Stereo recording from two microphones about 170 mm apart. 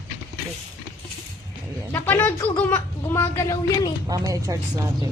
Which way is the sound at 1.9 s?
10° left (ahead or behind).